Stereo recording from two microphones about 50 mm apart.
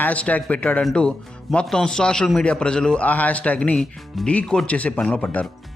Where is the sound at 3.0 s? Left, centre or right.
Left.